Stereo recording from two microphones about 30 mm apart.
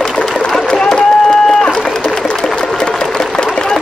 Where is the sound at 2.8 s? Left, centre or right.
Left.